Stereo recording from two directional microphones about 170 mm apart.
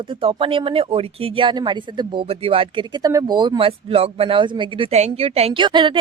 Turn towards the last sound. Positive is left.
turn(degrees=-30)  # may be behind; listen again after turning